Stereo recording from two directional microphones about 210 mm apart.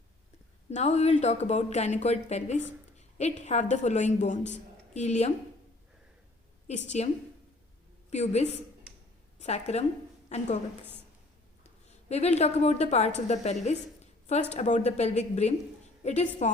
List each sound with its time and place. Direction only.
0.7 s a woman's voice: 30° left (ahead or behind)
6.7 s a woman's voice: 30° left (ahead or behind)
8.1 s a woman's voice: 30° left (ahead or behind)
11.9 s a woman's voice: 30° left (ahead or behind)